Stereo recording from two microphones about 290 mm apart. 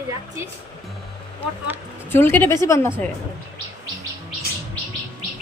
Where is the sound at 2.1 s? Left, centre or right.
Centre.